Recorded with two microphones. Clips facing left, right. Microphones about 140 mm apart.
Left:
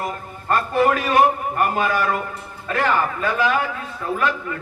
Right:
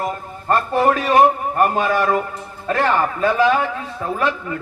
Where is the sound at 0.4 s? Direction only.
30° right (ahead or behind).